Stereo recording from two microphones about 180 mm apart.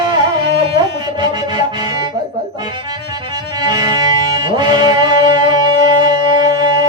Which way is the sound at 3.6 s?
25° right (ahead or behind).